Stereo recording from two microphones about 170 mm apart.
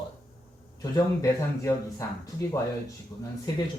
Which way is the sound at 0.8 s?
20° left (ahead or behind).